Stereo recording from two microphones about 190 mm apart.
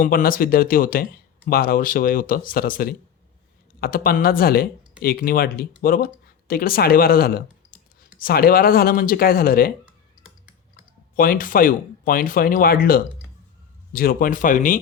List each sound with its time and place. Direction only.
0.0 s speech: 50° left (ahead or behind)
11.2 s speech: 45° left (ahead or behind)